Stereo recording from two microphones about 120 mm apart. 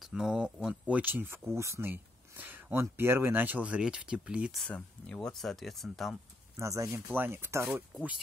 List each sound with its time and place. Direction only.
0.0 s speech: 5° right (ahead or behind)
4.6 s speech: 10° left (ahead or behind)
6.5 s speech: 25° right (ahead or behind)